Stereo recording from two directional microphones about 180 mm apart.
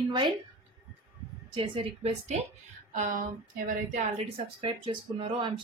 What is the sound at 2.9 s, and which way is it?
A woman's voice, 45° right (ahead or behind).